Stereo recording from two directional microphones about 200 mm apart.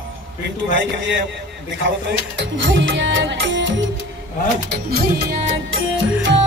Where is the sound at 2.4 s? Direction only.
65° right (ahead or behind).